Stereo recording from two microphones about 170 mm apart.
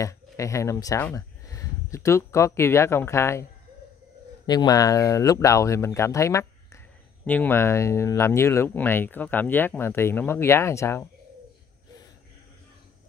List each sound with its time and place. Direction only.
0.0 s speech: 20° left (ahead or behind)
4.5 s speech: 25° left (ahead or behind)